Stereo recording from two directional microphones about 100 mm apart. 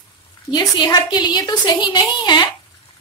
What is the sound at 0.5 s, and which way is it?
A woman's voice, 50° left (ahead or behind).